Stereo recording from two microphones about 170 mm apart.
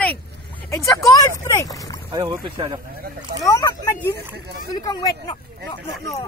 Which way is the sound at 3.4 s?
20° left (ahead or behind).